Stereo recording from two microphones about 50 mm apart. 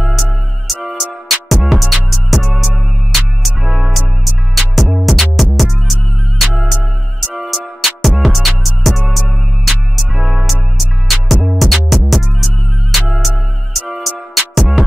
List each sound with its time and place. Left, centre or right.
0.7 s music: centre